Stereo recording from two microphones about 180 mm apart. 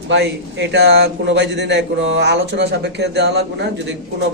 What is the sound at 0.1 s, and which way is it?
A man's voice, 75° right (ahead or behind).